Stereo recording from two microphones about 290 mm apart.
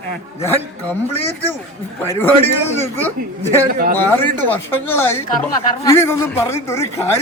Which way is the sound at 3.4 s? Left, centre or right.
Right.